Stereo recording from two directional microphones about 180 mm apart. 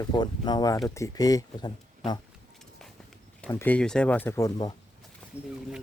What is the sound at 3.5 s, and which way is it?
Speech, 10° left (ahead or behind).